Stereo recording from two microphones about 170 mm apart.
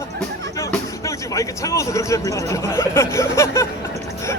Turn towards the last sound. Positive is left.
turn(degrees=15)  # may be behind; listen again after turning